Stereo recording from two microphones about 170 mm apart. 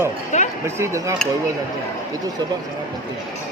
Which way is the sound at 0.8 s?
20° right (ahead or behind).